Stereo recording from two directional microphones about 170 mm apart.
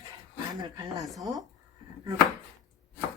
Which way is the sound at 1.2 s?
20° right (ahead or behind).